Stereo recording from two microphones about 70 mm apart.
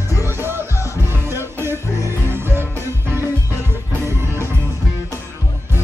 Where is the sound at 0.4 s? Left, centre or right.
Right.